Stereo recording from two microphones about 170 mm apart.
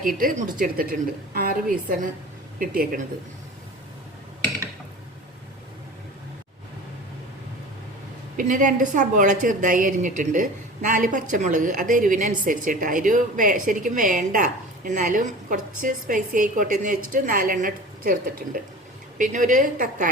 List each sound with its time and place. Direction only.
0.0 s a woman's voice: 55° right (ahead or behind)
8.4 s a woman's voice: 50° right (ahead or behind)